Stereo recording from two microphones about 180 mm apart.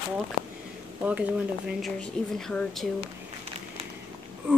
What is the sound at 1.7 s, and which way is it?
Speech, centre (ahead or behind).